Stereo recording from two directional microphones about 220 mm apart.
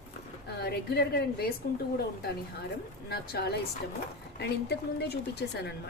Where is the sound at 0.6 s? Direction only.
45° left (ahead or behind).